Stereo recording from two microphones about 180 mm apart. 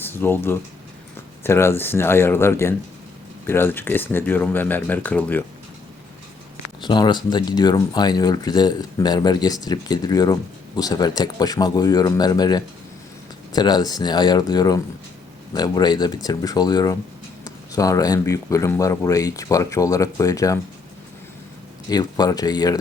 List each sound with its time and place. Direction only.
0.0 s speech: 10° left (ahead or behind)
6.8 s speech: 25° left (ahead or behind)
21.8 s speech: 20° left (ahead or behind)